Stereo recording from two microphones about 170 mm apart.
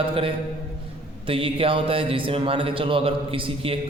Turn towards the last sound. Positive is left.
turn(degrees=-30)  # may be behind; listen again after turning